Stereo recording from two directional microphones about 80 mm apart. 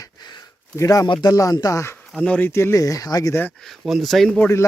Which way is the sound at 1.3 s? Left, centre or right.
Left.